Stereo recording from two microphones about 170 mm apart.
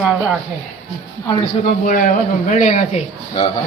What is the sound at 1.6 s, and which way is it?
A man's voice, 55° left (ahead or behind).